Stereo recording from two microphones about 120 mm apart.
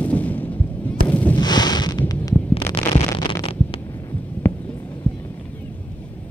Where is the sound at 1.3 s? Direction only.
35° left (ahead or behind).